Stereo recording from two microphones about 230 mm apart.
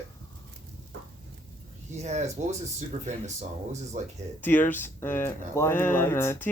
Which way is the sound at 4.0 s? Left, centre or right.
Right.